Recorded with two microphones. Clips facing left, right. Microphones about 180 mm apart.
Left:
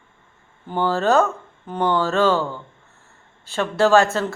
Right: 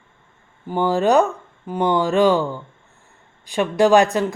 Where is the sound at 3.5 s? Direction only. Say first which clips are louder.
Right 2 dB; 15° right (ahead or behind).